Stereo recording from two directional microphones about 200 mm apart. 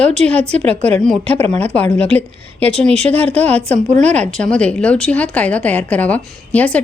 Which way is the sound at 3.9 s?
35° right (ahead or behind).